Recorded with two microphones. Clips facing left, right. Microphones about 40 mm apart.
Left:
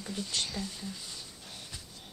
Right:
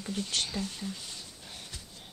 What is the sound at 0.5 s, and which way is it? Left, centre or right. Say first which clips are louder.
Speech: right 3 dB; right.